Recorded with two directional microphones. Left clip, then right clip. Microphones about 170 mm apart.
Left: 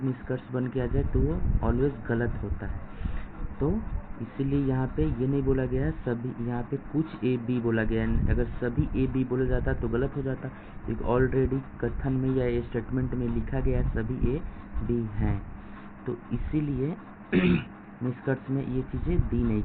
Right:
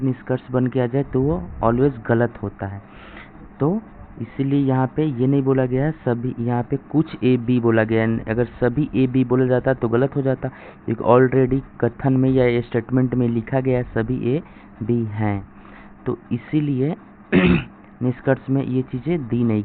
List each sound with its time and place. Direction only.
0.3 s speech: 80° right
1.6 s a man's voice: 85° right
4.4 s a man's voice: 90° right
18.3 s speech: 60° right (ahead or behind)